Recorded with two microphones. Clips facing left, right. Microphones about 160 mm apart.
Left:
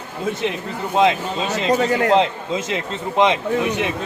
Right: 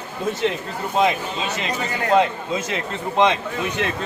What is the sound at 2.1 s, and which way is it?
A man's voice, 20° left (ahead or behind).